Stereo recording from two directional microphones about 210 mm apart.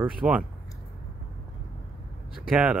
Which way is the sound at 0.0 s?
5° right (ahead or behind).